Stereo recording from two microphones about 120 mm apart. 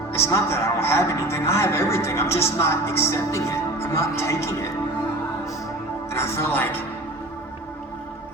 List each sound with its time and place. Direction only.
0.1 s speech: 25° left (ahead or behind)
6.1 s speech: 20° left (ahead or behind)